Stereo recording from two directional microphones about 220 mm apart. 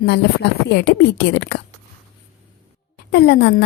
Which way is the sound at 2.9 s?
50° left (ahead or behind).